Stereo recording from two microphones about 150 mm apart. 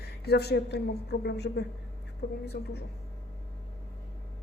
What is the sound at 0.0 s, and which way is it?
A woman's voice, 90° left.